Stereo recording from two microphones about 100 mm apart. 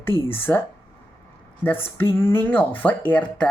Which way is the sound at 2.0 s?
25° left (ahead or behind).